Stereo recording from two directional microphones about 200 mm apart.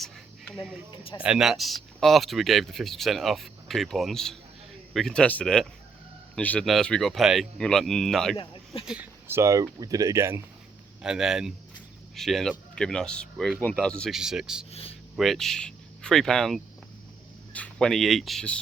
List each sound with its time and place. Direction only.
0.0 s a sound: centre (ahead or behind)
1.2 s speech: 5° right (ahead or behind)
11.0 s speech: 5° right (ahead or behind)
14.7 s speech: 30° left (ahead or behind)
15.1 s speech: centre (ahead or behind)